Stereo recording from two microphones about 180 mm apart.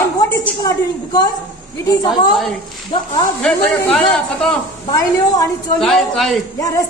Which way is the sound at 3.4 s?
5° left (ahead or behind).